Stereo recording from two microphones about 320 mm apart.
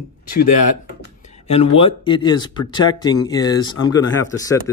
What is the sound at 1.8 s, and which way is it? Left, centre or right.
Speech, centre.